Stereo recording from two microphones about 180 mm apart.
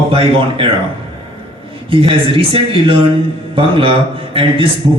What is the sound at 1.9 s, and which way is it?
A man's voice, 30° right (ahead or behind).